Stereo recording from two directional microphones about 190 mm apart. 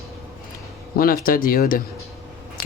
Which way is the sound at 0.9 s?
50° left (ahead or behind).